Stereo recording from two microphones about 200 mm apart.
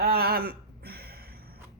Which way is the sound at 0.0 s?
50° right (ahead or behind).